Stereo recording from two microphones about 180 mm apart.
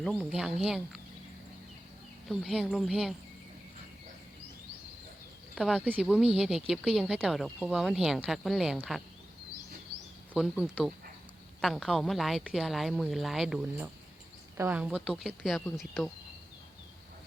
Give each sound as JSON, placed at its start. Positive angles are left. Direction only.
{"t": 0.0, "sound": "speech", "side_deg": 0}
{"t": 2.2, "sound": "speech", "side_deg": 0}
{"t": 5.5, "sound": "speech", "side_deg": -5}
{"t": 10.3, "sound": "speech", "side_deg": 0}